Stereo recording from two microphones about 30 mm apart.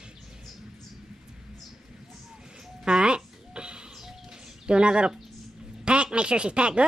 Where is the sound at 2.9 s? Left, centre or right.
Right.